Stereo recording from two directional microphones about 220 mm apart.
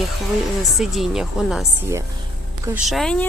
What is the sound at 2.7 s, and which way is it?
Speech, centre (ahead or behind).